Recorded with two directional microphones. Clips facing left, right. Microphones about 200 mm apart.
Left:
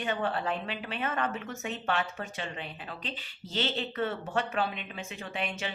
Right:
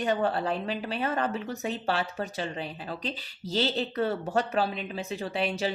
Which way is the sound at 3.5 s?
35° right (ahead or behind).